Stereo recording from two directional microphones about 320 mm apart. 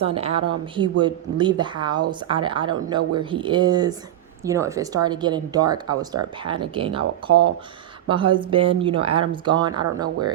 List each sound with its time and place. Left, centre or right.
0.0 s a woman's voice: centre